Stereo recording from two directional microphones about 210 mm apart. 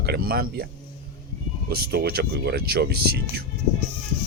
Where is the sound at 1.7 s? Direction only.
50° right (ahead or behind).